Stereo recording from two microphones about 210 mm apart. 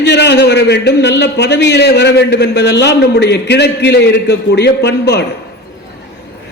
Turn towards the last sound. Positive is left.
turn(degrees=55)  # may be behind; listen again after turning